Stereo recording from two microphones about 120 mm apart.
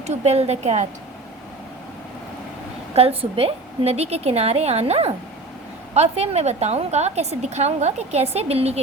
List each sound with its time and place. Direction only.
0.1 s a woman's voice: 60° right (ahead or behind)
2.9 s a woman's voice: 55° right (ahead or behind)